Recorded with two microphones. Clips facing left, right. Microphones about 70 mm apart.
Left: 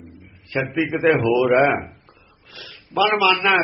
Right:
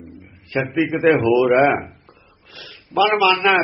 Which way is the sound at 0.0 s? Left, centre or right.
Right.